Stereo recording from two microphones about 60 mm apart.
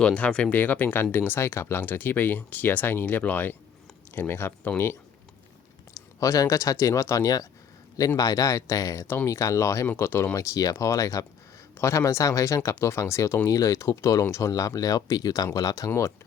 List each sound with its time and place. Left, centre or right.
0.0 s speech: centre
0.5 s speech: left
1.4 s speech: left
4.1 s speech: left
5.9 s speech: left
9.0 s speech: left
10.0 s speech: left
10.3 s speech: left
11.8 s speech: left